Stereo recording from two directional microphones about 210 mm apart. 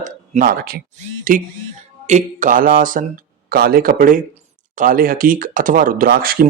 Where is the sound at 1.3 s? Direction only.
40° right (ahead or behind).